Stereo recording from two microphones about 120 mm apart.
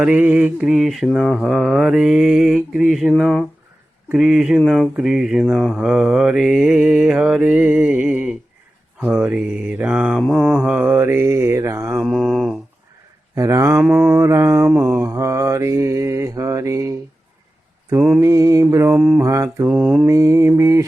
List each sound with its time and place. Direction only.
0.0 s mantra: 10° right (ahead or behind)
11.9 s mantra: centre (ahead or behind)
13.3 s mantra: 25° right (ahead or behind)
13.8 s mantra: 10° right (ahead or behind)
18.2 s mantra: 25° right (ahead or behind)
18.9 s mantra: 5° right (ahead or behind)
19.2 s mantra: 25° right (ahead or behind)
19.7 s mantra: 10° right (ahead or behind)
20.1 s mantra: 25° right (ahead or behind)